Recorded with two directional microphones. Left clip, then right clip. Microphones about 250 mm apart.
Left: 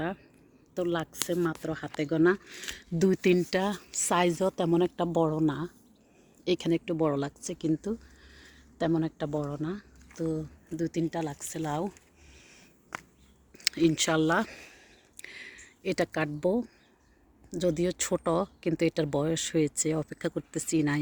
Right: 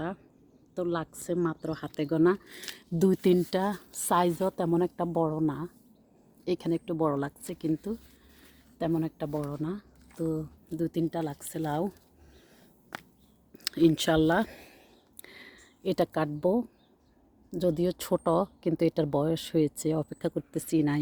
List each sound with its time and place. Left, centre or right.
0.8 s speech: centre; by 11.9 s right
13.5 s speech: centre
15.2 s a sound: centre
17.5 s speech: centre